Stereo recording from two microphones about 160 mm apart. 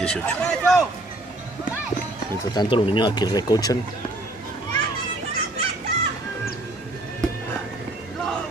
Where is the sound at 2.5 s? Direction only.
30° left (ahead or behind).